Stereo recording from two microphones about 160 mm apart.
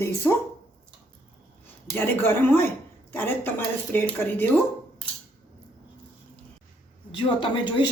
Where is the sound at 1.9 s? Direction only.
15° left (ahead or behind).